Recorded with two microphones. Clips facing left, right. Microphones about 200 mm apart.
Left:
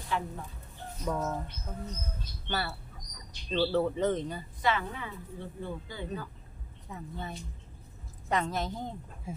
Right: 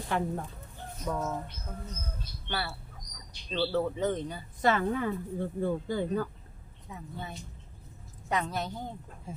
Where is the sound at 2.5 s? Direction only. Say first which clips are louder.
Left 1 dB; centre (ahead or behind).